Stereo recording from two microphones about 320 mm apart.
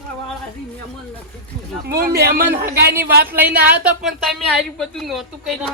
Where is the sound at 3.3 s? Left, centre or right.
Centre.